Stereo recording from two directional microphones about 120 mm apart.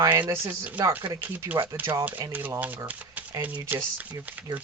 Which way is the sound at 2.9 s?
15° right (ahead or behind).